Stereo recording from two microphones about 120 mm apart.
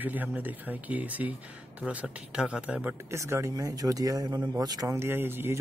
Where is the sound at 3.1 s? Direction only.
25° right (ahead or behind).